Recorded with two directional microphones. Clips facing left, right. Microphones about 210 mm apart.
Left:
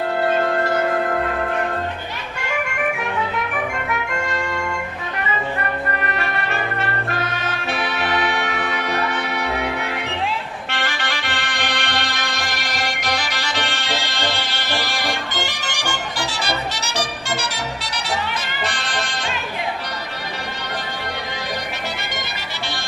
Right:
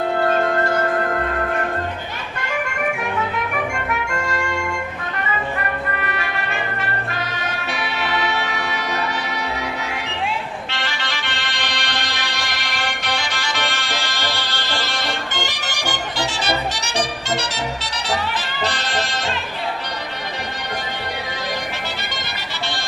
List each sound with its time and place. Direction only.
8.0 s music: 55° left (ahead or behind)
11.7 s music: 55° left (ahead or behind)
14.8 s music: 10° left (ahead or behind)
16.9 s music: 25° right (ahead or behind)